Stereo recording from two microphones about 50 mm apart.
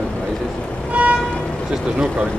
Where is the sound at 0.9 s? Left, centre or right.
Right.